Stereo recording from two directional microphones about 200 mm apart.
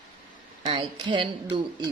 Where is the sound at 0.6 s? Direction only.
25° right (ahead or behind).